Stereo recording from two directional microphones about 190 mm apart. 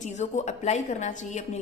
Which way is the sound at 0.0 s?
35° left (ahead or behind).